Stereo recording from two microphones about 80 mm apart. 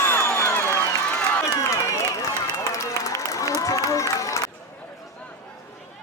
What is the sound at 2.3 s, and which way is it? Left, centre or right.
Run, left.